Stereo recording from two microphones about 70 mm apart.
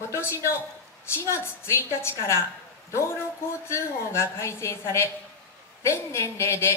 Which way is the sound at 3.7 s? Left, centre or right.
Left.